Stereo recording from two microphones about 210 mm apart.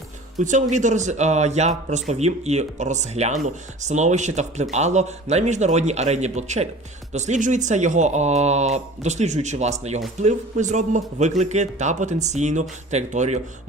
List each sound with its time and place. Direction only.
0.3 s speech: 35° right (ahead or behind)